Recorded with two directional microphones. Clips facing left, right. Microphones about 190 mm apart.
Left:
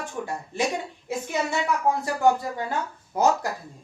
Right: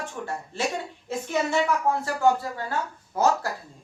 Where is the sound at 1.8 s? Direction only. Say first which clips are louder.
Left 1 dB; 15° left (ahead or behind).